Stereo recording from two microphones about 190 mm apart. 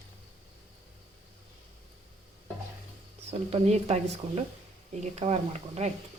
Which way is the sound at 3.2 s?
35° right (ahead or behind).